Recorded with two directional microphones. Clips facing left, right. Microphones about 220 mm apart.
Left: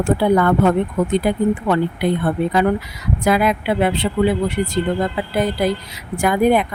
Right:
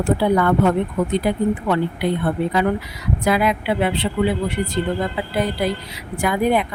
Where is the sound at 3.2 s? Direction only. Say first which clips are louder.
Left 2 dB; 45° left (ahead or behind).